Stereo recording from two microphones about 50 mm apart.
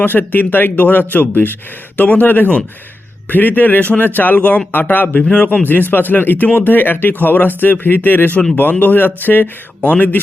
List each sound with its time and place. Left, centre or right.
0.0 s speech: left
4.4 s speech: left
4.7 s speech: left
5.2 s speech: left
5.9 s speech: left